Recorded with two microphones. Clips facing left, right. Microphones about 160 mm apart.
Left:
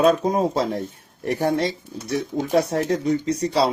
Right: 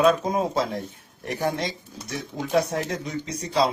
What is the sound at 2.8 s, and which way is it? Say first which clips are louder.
Speech: left 8 dB; 55° left (ahead or behind).